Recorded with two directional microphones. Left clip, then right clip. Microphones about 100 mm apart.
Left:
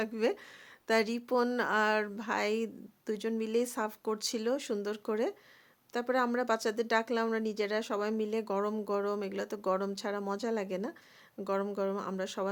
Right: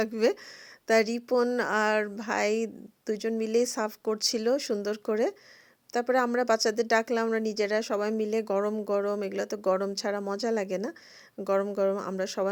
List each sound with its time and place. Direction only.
0.0 s speech: 45° right (ahead or behind)
0.9 s a woman's voice: 20° right (ahead or behind)